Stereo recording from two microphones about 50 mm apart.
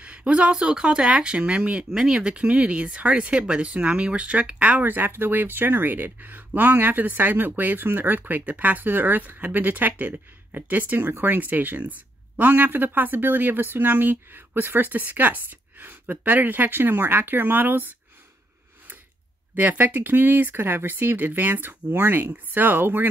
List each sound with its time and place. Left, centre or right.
0.0 s speech: right
19.5 s speech: right